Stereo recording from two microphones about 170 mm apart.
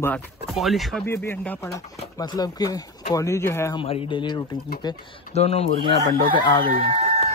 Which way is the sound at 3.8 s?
30° left (ahead or behind).